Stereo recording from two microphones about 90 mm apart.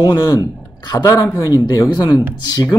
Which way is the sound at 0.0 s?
40° left (ahead or behind).